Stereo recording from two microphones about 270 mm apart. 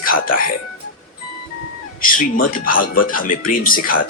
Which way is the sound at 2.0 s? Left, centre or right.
Left.